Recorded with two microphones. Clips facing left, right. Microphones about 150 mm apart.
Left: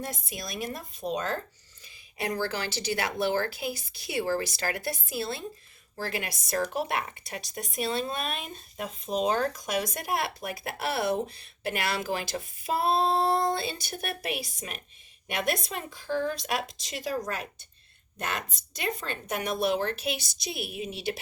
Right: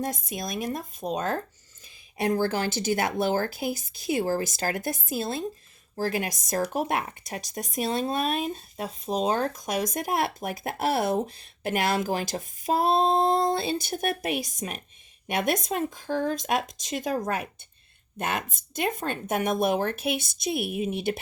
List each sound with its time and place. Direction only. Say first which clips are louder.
0.0 s speech: right 6 dB; 45° right (ahead or behind)
18.2 s speech: right 4 dB; 55° right (ahead or behind)